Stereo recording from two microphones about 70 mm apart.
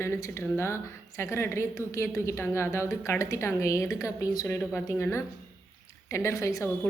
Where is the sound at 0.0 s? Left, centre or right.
Left.